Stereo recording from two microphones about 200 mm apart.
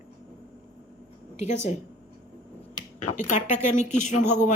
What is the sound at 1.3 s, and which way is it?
Speech, 35° left (ahead or behind).